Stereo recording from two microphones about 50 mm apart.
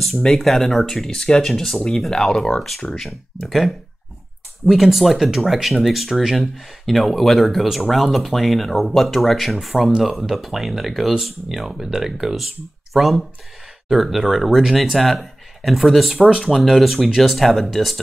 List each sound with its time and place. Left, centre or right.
0.0 s speech: centre